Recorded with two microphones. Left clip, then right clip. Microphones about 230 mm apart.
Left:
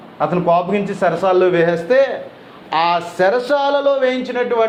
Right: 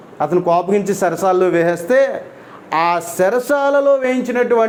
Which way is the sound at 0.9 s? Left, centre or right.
Right.